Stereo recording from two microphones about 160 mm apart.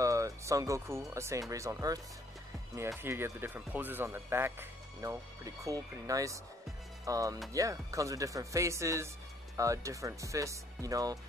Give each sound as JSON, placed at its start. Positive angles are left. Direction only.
{"t": 0.0, "sound": "music", "side_deg": -20}
{"t": 1.1, "sound": "speech", "side_deg": -20}
{"t": 3.0, "sound": "speech", "side_deg": -15}